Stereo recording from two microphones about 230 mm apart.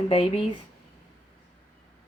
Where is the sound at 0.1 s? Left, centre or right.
Left.